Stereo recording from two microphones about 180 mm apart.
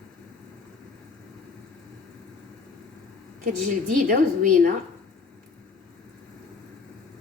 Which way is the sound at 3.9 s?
45° right (ahead or behind).